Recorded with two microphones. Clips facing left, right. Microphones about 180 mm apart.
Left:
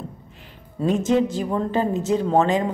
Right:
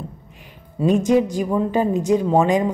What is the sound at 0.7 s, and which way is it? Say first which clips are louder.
A woman's voice: right 3 dB; 15° right (ahead or behind).